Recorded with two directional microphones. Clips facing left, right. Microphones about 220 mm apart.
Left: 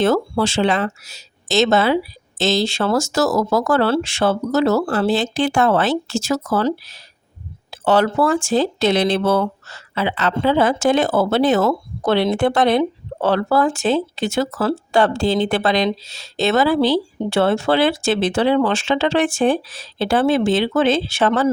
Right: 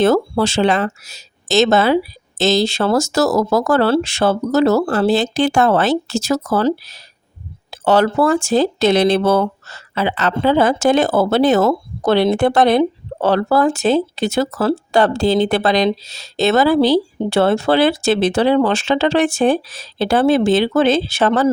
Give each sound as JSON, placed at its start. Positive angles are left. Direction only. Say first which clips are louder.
{"t": 0.0, "sound": "speech", "louder": "right 3 dB", "side_deg": -40}